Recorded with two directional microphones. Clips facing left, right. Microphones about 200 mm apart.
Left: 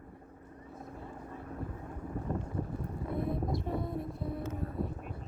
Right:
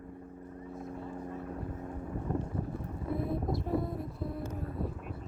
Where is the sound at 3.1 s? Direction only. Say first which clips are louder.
Even; centre (ahead or behind).